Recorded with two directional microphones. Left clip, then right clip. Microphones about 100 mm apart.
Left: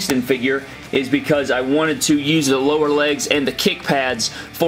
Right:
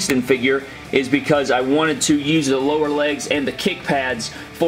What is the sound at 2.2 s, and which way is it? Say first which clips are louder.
Speech: left 1 dB; 25° left (ahead or behind).